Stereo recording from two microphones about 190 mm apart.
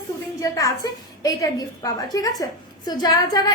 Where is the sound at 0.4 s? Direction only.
20° left (ahead or behind).